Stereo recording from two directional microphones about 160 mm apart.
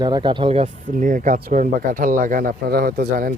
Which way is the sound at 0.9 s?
55° right (ahead or behind).